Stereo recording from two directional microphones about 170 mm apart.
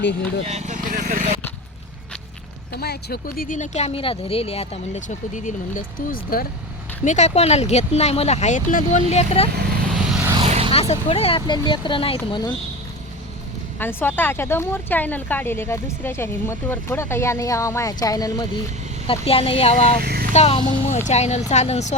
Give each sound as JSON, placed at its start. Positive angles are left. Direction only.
{"t": 0.4, "sound": "speech", "side_deg": -45}
{"t": 2.8, "sound": "speech", "side_deg": 65}
{"t": 7.0, "sound": "speech", "side_deg": 45}
{"t": 10.3, "sound": "vehicle", "side_deg": -35}
{"t": 10.7, "sound": "speech", "side_deg": 35}
{"t": 13.7, "sound": "speech", "side_deg": 10}
{"t": 19.0, "sound": "speech", "side_deg": 35}
{"t": 20.0, "sound": "vehicle", "side_deg": -65}
{"t": 20.3, "sound": "speech", "side_deg": 35}